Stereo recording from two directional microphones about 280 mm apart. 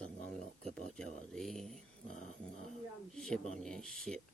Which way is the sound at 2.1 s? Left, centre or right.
Left.